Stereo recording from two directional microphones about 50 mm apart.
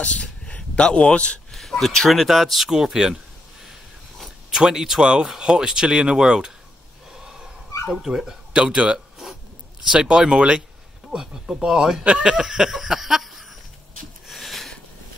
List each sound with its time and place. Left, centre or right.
0.0 s speech: left
1.5 s speech: centre
4.5 s speech: centre
7.1 s a sound: centre
7.9 s speech: centre
14.2 s a sound: centre